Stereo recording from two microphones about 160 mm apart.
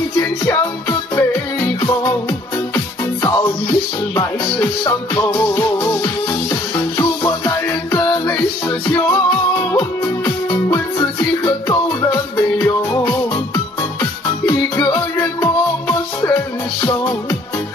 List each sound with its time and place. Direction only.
2.7 s music: 15° left (ahead or behind)
7.0 s music: 15° left (ahead or behind)
14.4 s music: 10° left (ahead or behind)